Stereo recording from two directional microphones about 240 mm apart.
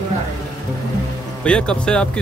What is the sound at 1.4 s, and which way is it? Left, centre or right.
Speech, centre.